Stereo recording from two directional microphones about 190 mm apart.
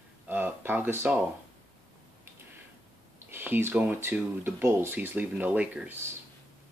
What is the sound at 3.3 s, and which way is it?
Speech, 10° right (ahead or behind).